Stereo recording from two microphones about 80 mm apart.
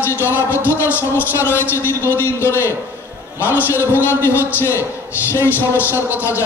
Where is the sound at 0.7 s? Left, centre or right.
Left.